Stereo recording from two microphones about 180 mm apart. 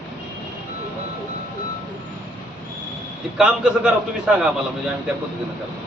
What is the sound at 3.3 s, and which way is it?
Speech, 5° right (ahead or behind).